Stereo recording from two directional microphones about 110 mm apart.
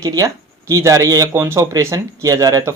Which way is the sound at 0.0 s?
35° right (ahead or behind).